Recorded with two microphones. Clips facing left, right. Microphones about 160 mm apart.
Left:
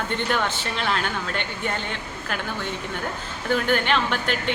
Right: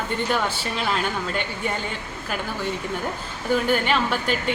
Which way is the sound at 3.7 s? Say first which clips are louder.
Right 1 dB; 5° right (ahead or behind).